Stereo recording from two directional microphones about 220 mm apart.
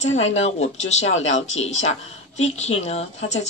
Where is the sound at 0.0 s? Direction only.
30° left (ahead or behind).